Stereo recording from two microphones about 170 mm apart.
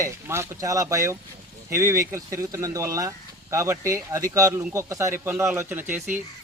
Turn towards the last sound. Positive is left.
turn(degrees=-10)  # may be behind; listen again after turning